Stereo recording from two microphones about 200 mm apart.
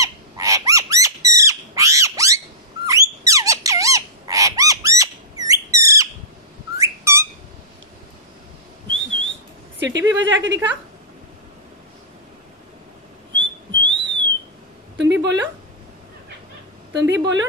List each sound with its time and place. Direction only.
0.0 s bird: 15° right (ahead or behind)
2.8 s squawk: 15° right (ahead or behind)
6.7 s whistling: 15° right (ahead or behind)
8.9 s whistling: 70° right (ahead or behind)
9.8 s a woman's voice: 65° right (ahead or behind)
13.3 s whistling: 65° right (ahead or behind)
15.1 s a sound: 60° right (ahead or behind)
16.9 s a sound: 65° right (ahead or behind)